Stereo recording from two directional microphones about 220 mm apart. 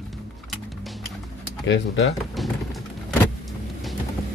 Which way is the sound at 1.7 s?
50° left (ahead or behind).